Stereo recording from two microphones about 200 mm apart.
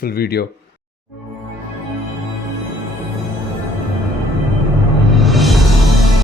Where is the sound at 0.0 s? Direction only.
50° left (ahead or behind).